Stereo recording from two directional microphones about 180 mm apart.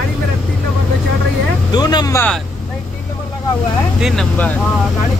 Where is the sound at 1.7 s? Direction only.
25° left (ahead or behind).